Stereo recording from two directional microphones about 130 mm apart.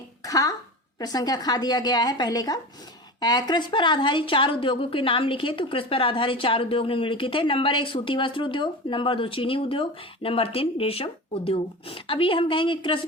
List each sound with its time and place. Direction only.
0.3 s a woman's voice: 25° left (ahead or behind)